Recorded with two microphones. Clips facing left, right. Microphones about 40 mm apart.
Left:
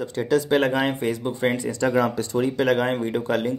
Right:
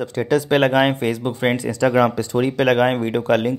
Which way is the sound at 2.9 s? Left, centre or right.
Right.